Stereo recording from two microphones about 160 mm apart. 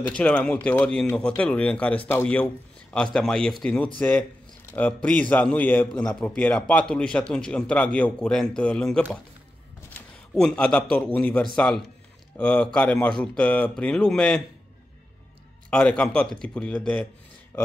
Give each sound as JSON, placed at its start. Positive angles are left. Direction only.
{"t": 0.0, "sound": "a man's voice", "side_deg": 5}
{"t": 10.3, "sound": "a man's voice", "side_deg": 5}
{"t": 15.7, "sound": "a man's voice", "side_deg": 5}